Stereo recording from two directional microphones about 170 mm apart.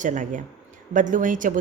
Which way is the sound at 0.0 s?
50° right (ahead or behind).